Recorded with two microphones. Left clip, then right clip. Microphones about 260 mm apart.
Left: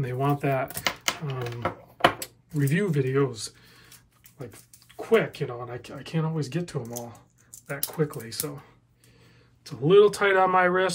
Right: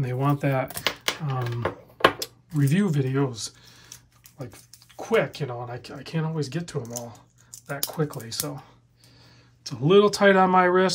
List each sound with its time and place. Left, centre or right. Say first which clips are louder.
0.0 s speech: even; centre
0.8 s a sound: right 1 dB; centre
2.1 s a sound: right 3 dB; centre
2.9 s speech: left 2 dB; centre
5.1 s speech: even; centre
6.8 s speech: right 2 dB; right
7.6 s speech: even; centre
9.6 s speech: left 1 dB; centre